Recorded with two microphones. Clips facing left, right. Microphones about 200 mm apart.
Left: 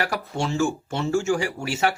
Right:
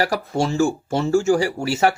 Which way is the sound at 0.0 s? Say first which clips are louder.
Right 5 dB; 35° right (ahead or behind).